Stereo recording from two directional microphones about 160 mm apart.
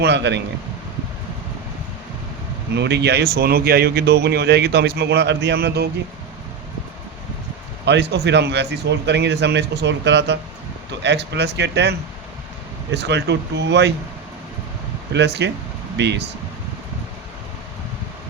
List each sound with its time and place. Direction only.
0.0 s speech: 90° right
2.7 s speech: 90° right
7.9 s speech: 90° right
15.1 s speech: 90° right